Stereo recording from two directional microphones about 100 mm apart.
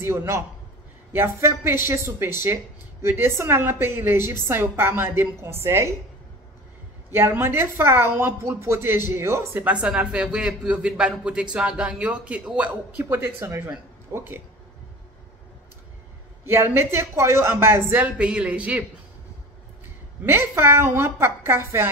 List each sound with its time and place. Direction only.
0.0 s speech: 25° right (ahead or behind)
7.1 s speech: 25° right (ahead or behind)
13.0 s speech: 25° right (ahead or behind)
16.4 s speech: 25° right (ahead or behind)
18.1 s speech: 10° right (ahead or behind)
20.2 s speech: 25° right (ahead or behind)